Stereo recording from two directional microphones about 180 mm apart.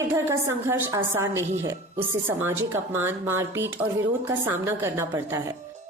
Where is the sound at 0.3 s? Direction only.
15° right (ahead or behind).